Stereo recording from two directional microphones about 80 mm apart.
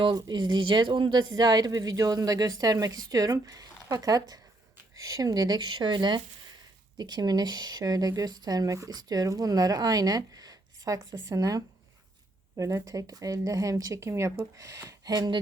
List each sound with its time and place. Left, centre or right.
0.0 s speech: right
1.3 s speech: right